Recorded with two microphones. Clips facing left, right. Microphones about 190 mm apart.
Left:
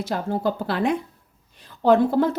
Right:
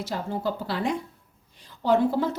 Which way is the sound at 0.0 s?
55° left (ahead or behind).